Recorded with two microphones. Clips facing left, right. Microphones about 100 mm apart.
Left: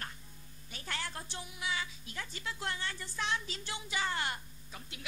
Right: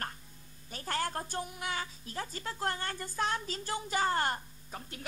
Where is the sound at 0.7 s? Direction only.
40° right (ahead or behind).